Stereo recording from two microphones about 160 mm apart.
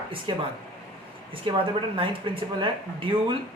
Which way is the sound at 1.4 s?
35° right (ahead or behind).